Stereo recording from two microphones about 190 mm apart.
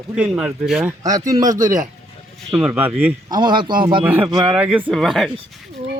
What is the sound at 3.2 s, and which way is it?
Speech, 20° right (ahead or behind).